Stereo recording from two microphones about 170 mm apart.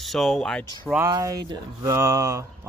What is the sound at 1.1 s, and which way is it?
Speech, 20° right (ahead or behind).